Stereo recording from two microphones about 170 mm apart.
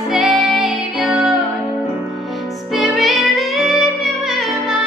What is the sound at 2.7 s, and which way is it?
Music, centre (ahead or behind).